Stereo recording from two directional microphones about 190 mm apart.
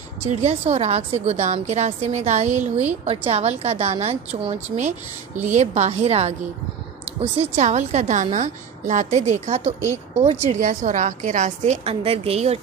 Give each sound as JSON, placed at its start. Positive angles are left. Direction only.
{"t": 0.2, "sound": "a woman's voice", "side_deg": -35}